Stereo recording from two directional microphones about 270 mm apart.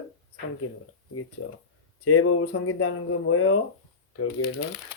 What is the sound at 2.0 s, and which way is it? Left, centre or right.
Speech, left.